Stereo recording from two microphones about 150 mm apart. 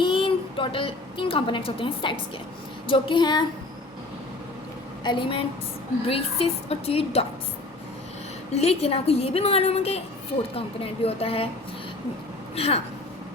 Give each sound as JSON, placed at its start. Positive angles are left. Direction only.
{"t": 0.0, "sound": "a woman's voice", "side_deg": 35}
{"t": 5.0, "sound": "a woman's voice", "side_deg": 35}
{"t": 8.5, "sound": "a woman's voice", "side_deg": 45}
{"t": 12.5, "sound": "a woman's voice", "side_deg": 40}